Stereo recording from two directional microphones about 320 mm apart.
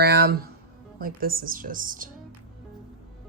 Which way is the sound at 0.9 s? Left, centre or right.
Right.